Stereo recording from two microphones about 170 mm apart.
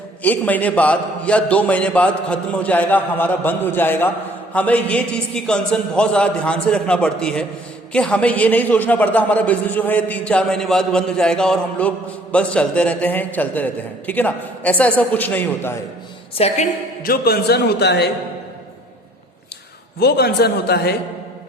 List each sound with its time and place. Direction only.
0.2 s a man's voice: 10° left (ahead or behind)
16.4 s a woman's voice: 35° left (ahead or behind)
17.0 s a man's voice: 65° left (ahead or behind)
20.0 s a man's voice: 70° left (ahead or behind)